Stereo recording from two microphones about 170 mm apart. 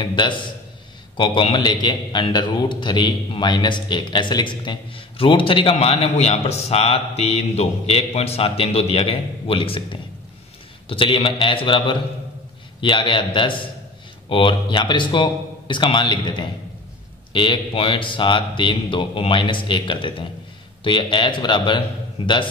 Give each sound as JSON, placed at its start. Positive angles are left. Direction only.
{"t": 0.0, "sound": "a man's voice", "side_deg": 25}
{"t": 10.9, "sound": "a man's voice", "side_deg": 30}